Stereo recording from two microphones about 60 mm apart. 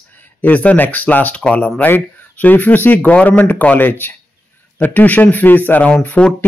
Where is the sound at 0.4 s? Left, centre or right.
Left.